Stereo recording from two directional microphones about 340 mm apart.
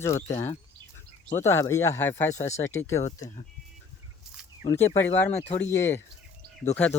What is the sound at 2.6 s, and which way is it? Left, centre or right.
Speech, centre.